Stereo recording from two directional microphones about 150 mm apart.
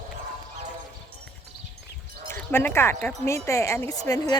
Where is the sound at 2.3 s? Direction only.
15° left (ahead or behind).